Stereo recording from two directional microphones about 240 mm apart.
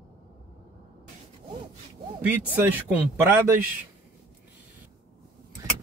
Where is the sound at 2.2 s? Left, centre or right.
Centre.